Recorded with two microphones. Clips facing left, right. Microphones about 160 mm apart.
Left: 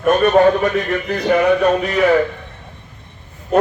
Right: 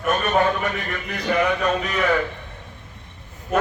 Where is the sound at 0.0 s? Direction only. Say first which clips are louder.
Left 8 dB; 40° left (ahead or behind).